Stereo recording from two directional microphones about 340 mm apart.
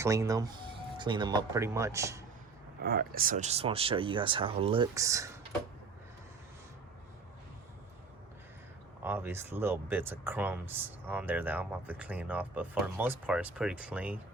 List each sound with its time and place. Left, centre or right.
0.0 s speech: centre
2.8 s speech: right; by 5.4 s centre
9.0 s speech: centre